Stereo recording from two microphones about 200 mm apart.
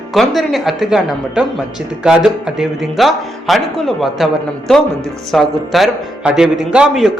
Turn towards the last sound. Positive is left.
turn(degrees=-5)  # may be behind; listen again after turning